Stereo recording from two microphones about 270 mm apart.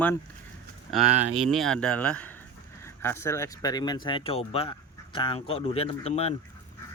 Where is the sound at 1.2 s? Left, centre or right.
Right.